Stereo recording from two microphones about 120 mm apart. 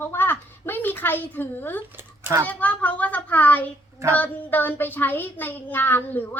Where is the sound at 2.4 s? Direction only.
15° left (ahead or behind).